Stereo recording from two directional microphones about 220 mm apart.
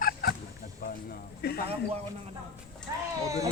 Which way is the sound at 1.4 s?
45° left (ahead or behind).